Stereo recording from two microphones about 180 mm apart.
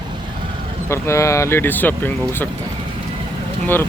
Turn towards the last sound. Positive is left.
turn(degrees=10)  # may be behind; listen again after turning